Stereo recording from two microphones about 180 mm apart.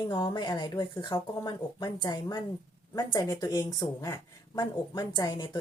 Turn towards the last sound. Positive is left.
turn(degrees=20)  # may be behind; listen again after turning